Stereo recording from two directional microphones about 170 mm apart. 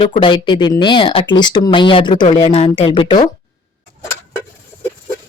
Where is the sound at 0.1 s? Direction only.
30° left (ahead or behind).